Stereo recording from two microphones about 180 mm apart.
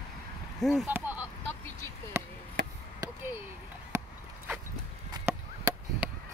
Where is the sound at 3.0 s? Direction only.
10° right (ahead or behind).